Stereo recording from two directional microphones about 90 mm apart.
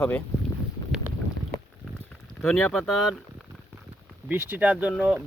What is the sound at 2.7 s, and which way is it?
Speech, centre (ahead or behind).